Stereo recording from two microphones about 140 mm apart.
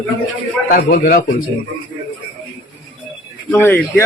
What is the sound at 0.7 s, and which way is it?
Speech, 85° left.